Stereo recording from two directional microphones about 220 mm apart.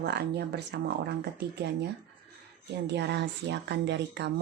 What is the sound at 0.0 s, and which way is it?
Speech, 50° right (ahead or behind).